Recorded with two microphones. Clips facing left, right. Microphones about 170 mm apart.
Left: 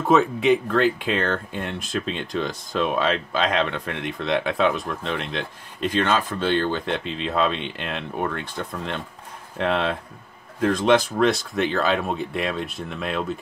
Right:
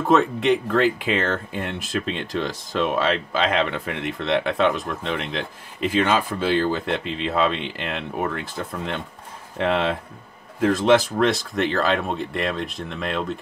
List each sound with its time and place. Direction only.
0.0 s speech: centre (ahead or behind)